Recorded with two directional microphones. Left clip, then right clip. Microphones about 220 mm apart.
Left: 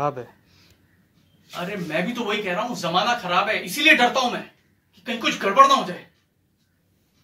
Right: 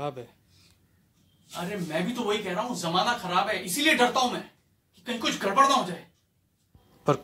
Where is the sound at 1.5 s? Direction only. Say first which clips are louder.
Left 5 dB; 5° left (ahead or behind).